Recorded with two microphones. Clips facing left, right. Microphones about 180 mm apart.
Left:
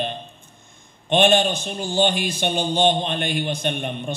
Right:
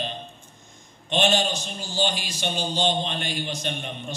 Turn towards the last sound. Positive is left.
turn(degrees=55)  # may be behind; listen again after turning